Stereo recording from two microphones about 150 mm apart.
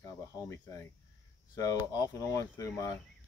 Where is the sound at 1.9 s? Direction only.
20° left (ahead or behind).